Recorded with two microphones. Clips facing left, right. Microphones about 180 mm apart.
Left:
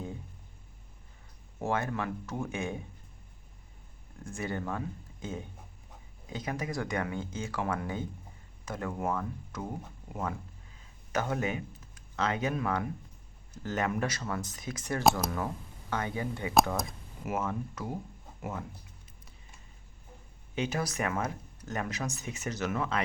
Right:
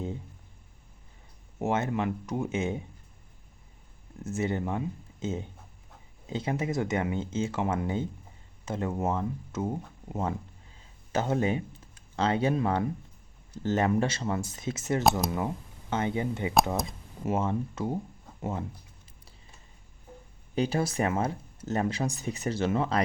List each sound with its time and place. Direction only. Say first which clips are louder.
1.5 s speech: right 4 dB; 20° right (ahead or behind)
4.2 s speech: right 6 dB; 25° right (ahead or behind)
20.6 s speech: right 5 dB; 30° right (ahead or behind)